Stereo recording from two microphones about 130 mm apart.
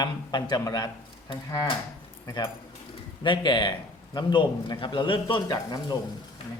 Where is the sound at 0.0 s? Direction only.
35° left (ahead or behind).